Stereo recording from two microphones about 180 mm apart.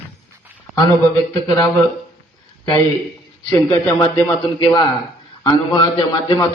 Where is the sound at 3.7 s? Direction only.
20° left (ahead or behind).